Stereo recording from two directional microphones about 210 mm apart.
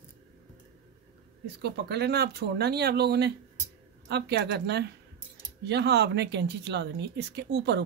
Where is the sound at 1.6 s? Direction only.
50° right (ahead or behind).